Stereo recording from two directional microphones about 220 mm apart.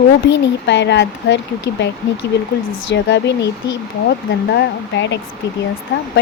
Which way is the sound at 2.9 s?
55° left (ahead or behind).